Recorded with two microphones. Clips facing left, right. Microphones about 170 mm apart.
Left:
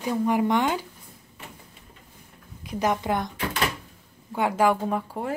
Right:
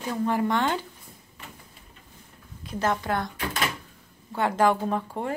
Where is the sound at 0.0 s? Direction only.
15° left (ahead or behind).